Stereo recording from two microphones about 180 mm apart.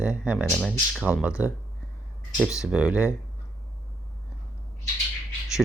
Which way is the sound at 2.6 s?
5° right (ahead or behind).